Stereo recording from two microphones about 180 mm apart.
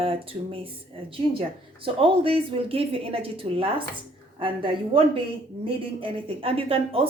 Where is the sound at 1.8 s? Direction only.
30° right (ahead or behind).